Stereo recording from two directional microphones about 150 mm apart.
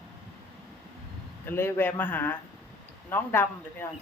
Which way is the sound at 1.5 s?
15° left (ahead or behind).